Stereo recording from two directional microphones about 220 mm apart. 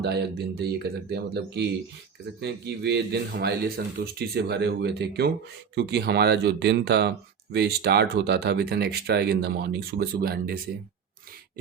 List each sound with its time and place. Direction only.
0.0 s speech: 50° right (ahead or behind)